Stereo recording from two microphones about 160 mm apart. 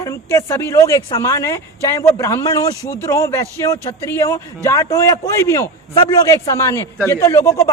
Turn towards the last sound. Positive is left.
turn(degrees=20)  # may be behind; listen again after turning